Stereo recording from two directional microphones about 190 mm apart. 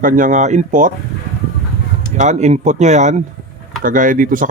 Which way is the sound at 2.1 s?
35° right (ahead or behind).